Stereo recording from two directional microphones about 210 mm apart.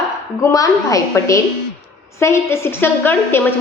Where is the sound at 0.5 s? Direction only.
15° left (ahead or behind).